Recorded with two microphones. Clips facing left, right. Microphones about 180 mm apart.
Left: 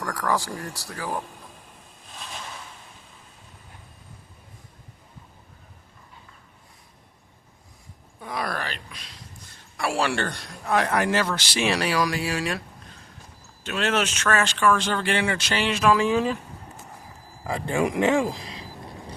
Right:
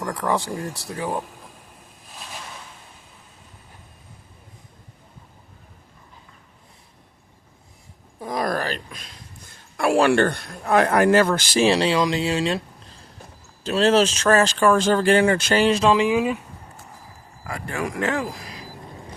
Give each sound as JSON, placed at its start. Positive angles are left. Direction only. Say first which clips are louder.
{"t": 0.0, "sound": "speech", "louder": "right 2 dB", "side_deg": -20}
{"t": 8.2, "sound": "a sound", "louder": "right 6 dB", "side_deg": -40}
{"t": 9.7, "sound": "a man's voice", "louder": "right 8 dB", "side_deg": -55}
{"t": 11.6, "sound": "speech", "louder": "right 5 dB", "side_deg": -25}
{"t": 15.8, "sound": "speech", "louder": "right 2 dB", "side_deg": -20}
{"t": 17.4, "sound": "speech", "louder": "left 4 dB", "side_deg": 25}